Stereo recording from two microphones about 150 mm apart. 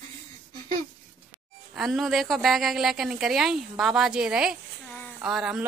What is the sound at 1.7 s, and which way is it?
A woman's voice, centre (ahead or behind).